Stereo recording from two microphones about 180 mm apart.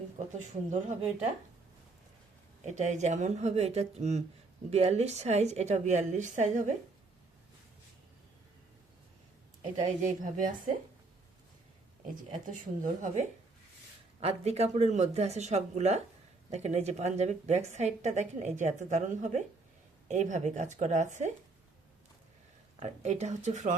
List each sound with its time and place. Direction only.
0.3 s speech: 45° right (ahead or behind)
2.6 s a woman's voice: 40° right (ahead or behind)
9.8 s speech: 45° right (ahead or behind)
12.3 s speech: 45° right (ahead or behind)
14.2 s a woman's voice: 35° right (ahead or behind)
22.8 s a woman's voice: 40° right (ahead or behind)